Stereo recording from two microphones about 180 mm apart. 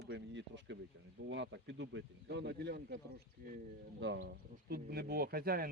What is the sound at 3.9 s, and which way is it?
Speech, 75° right (ahead or behind).